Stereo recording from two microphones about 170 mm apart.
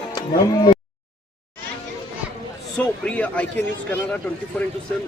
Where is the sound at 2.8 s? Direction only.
10° left (ahead or behind).